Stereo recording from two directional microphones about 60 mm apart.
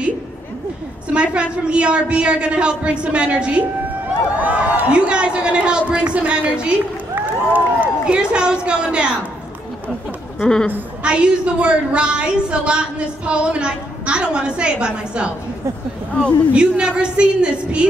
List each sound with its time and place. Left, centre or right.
1.1 s a woman's voice: centre
7.2 s speech: right
8.2 s a woman's voice: centre
10.4 s speech: centre
11.0 s a woman's voice: centre
16.5 s a woman's voice: centre